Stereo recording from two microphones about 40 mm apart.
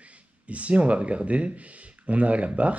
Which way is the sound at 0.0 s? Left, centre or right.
Right.